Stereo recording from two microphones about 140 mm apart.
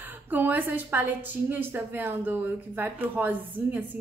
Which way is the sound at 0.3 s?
15° right (ahead or behind).